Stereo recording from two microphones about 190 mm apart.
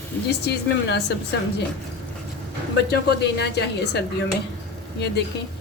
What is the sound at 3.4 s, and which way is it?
Speech, 60° left (ahead or behind).